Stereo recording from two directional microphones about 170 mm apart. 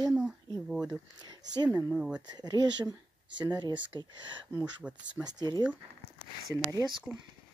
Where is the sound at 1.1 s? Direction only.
25° right (ahead or behind).